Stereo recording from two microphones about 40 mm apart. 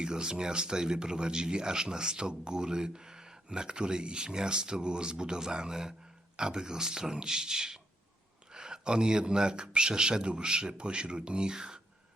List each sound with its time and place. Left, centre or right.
0.0 s a man's voice: centre